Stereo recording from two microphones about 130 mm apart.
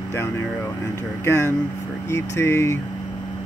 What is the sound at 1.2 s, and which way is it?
Speech, 20° left (ahead or behind).